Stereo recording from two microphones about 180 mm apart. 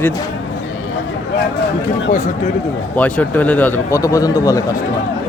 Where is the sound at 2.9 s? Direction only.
10° left (ahead or behind).